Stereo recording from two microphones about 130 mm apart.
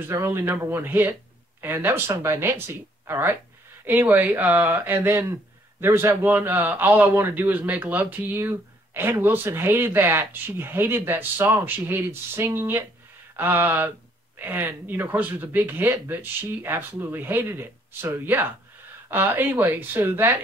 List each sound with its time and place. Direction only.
0.1 s a man's voice: 20° right (ahead or behind)